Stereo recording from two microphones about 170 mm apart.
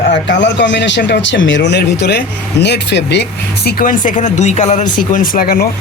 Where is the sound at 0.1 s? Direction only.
90° left; by 4.9 s 45° left (ahead or behind).